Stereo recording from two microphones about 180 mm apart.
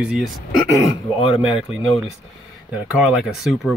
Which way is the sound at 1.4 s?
5° right (ahead or behind).